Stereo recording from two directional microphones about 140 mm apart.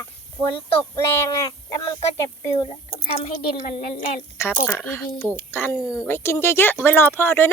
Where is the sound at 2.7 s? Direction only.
40° left (ahead or behind).